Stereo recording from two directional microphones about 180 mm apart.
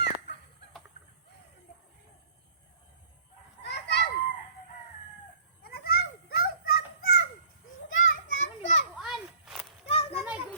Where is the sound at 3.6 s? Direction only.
70° left (ahead or behind).